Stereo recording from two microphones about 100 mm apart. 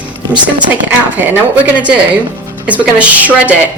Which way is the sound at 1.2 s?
15° right (ahead or behind).